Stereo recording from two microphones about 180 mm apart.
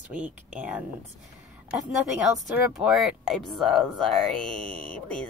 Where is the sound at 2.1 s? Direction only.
5° right (ahead or behind).